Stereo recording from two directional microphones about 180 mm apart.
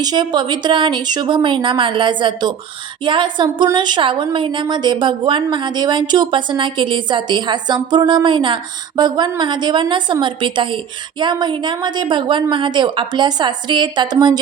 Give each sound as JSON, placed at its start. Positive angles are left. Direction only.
{"t": 0.0, "sound": "a woman's voice", "side_deg": -25}